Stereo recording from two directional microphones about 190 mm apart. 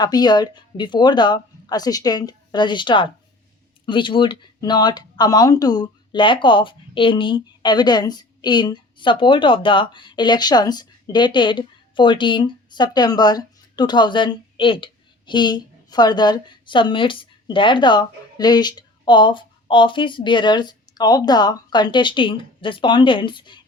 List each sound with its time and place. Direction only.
0.0 s speech: 20° left (ahead or behind)